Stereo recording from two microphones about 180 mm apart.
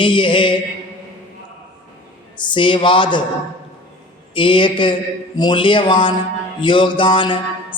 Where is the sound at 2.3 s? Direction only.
25° left (ahead or behind).